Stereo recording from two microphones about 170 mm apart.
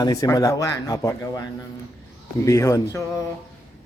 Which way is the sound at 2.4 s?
15° left (ahead or behind).